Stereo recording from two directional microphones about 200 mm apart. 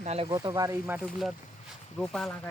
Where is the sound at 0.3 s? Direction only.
15° right (ahead or behind).